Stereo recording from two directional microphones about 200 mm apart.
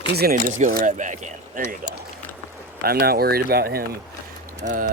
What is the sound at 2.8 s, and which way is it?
Speech, 50° right (ahead or behind).